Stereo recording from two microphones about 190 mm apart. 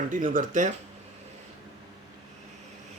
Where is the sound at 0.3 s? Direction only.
45° right (ahead or behind).